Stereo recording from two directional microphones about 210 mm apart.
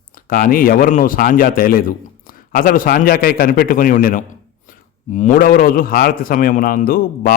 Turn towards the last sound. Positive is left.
turn(degrees=45)  # may be behind; listen again after turning